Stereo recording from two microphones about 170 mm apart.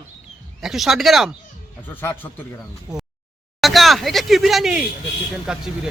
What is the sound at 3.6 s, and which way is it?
Speech, centre (ahead or behind).